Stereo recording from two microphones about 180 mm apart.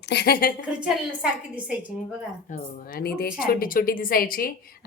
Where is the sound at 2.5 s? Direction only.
55° left (ahead or behind).